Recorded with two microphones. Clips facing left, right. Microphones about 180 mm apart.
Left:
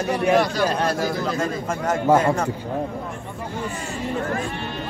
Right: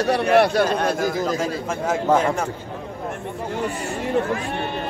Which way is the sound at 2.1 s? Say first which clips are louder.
Left 2 dB; 10° left (ahead or behind).